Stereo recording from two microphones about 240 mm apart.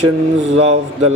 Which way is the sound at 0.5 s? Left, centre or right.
Right.